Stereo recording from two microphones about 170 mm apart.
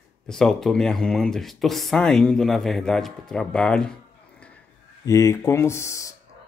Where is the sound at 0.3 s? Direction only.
5° left (ahead or behind).